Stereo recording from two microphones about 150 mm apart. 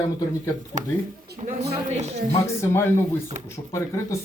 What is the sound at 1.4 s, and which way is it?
Speech, 45° right (ahead or behind).